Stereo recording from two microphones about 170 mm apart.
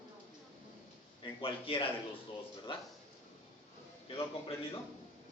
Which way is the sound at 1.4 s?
30° left (ahead or behind).